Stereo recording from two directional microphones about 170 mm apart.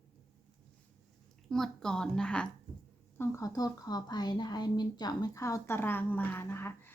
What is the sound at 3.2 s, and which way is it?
A woman's voice, 20° left (ahead or behind).